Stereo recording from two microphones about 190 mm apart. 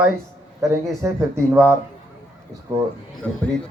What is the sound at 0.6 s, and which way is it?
Speech, 15° right (ahead or behind).